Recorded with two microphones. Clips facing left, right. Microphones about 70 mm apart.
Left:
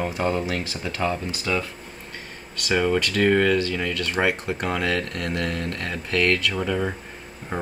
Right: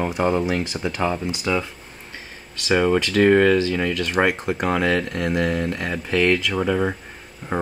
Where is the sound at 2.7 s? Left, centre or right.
Centre.